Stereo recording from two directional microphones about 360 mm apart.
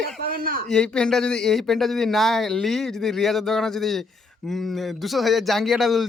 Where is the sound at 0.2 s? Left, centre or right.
Right.